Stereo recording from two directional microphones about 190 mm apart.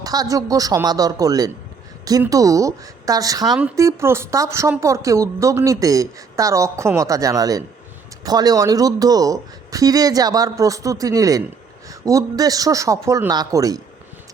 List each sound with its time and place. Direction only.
0.0 s speech: 20° right (ahead or behind)